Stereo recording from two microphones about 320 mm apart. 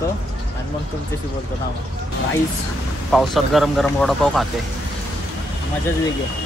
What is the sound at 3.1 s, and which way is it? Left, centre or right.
Speech, centre.